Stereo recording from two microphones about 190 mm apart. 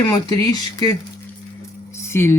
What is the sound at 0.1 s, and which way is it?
Speech, 20° left (ahead or behind).